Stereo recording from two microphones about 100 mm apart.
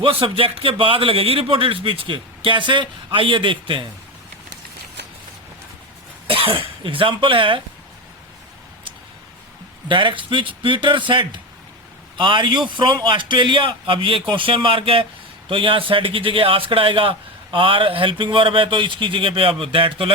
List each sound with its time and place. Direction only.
0.0 s a man's voice: 65° right (ahead or behind)
6.2 s speech: 65° right (ahead or behind)
9.9 s a man's voice: 55° right (ahead or behind)